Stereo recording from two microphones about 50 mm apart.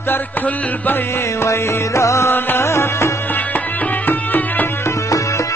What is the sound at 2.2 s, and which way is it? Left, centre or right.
Music, left.